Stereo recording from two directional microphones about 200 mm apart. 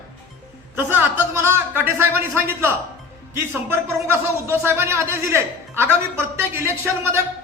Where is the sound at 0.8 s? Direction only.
10° right (ahead or behind).